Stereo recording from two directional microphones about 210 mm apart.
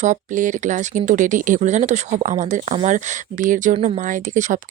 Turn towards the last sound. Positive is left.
turn(degrees=-40)  # may be behind; listen again after turning